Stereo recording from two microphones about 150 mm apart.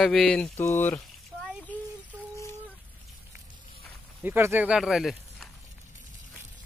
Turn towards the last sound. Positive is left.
turn(degrees=0)  # may be behind; listen again after turning